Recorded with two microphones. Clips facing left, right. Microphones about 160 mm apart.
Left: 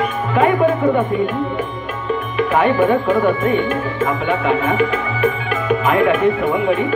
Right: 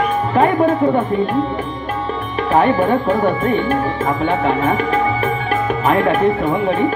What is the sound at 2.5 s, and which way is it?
Speech, 40° right (ahead or behind).